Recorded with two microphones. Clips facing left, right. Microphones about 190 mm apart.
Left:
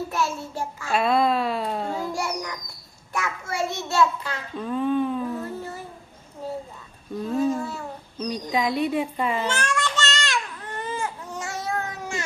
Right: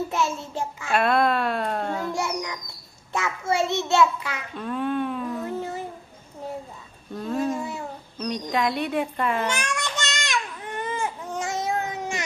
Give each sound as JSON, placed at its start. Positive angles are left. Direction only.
{"t": 0.1, "sound": "child singing", "side_deg": -20}
{"t": 0.9, "sound": "speech", "side_deg": 0}
{"t": 2.1, "sound": "a sound", "side_deg": -20}
{"t": 3.1, "sound": "child singing", "side_deg": -25}
{"t": 4.5, "sound": "a sound", "side_deg": 0}
{"t": 5.4, "sound": "a sound", "side_deg": -15}
{"t": 7.3, "sound": "babbling", "side_deg": 0}
{"t": 8.2, "sound": "speech", "side_deg": 0}
{"t": 9.5, "sound": "baby cry", "side_deg": -15}